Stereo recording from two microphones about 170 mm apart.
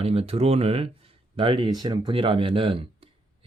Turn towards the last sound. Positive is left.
turn(degrees=-35)  # may be behind; listen again after turning